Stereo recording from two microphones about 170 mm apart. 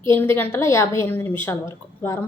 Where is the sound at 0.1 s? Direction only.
10° left (ahead or behind).